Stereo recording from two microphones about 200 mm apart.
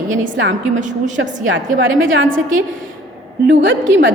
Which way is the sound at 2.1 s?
75° right (ahead or behind).